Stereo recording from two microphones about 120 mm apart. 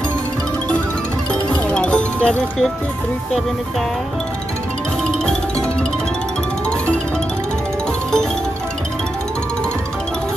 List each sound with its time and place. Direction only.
1.5 s music: 10° left (ahead or behind)